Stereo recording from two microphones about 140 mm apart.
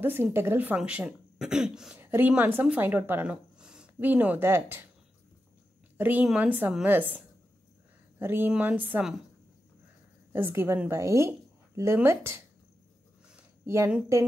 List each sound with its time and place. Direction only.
0.0 s speech: 15° right (ahead or behind)
2.0 s speech: 15° right (ahead or behind)
5.9 s a woman's voice: 15° right (ahead or behind)
8.2 s speech: 15° right (ahead or behind)
10.3 s a woman's voice: 15° right (ahead or behind)
13.7 s a woman's voice: 20° right (ahead or behind)